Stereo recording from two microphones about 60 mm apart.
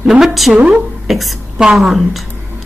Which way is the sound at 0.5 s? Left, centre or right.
Centre.